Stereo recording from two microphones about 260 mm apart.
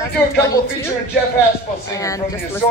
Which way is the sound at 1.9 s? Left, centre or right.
Centre.